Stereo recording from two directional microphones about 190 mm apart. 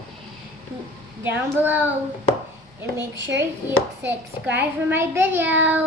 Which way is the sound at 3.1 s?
75° right (ahead or behind).